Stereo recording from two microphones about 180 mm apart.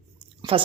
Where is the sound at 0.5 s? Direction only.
30° right (ahead or behind).